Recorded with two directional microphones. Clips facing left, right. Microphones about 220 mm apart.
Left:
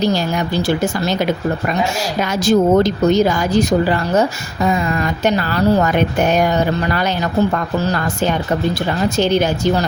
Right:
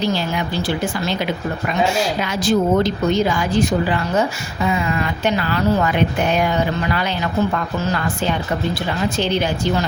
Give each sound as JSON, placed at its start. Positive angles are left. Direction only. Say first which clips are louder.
{"t": 0.1, "sound": "speech", "louder": "left 3 dB", "side_deg": 45}